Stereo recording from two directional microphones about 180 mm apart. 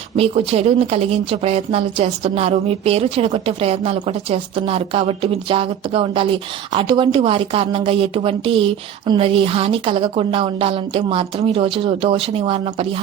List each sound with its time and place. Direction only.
0.2 s speech: 35° right (ahead or behind)